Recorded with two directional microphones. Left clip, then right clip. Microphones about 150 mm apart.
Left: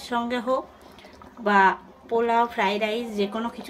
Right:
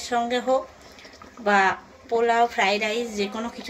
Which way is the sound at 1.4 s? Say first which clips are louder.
Left 1 dB; 90° left.